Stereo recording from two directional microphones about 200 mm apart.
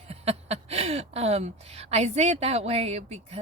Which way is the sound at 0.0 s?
30° right (ahead or behind).